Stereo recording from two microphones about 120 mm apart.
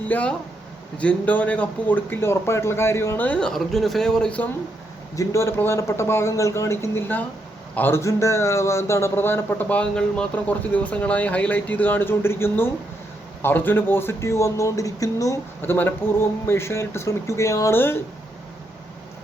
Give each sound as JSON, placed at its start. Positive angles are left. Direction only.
{"t": 0.1, "sound": "a man's voice", "side_deg": 10}
{"t": 5.1, "sound": "a man's voice", "side_deg": 25}
{"t": 15.6, "sound": "a man's voice", "side_deg": 15}